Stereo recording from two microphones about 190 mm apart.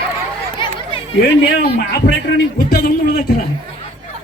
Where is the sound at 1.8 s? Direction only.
60° left (ahead or behind).